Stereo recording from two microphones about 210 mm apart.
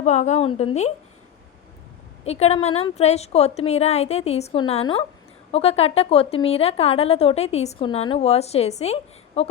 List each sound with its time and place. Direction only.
0.0 s a woman's voice: 35° left (ahead or behind)
2.2 s a woman's voice: 30° left (ahead or behind)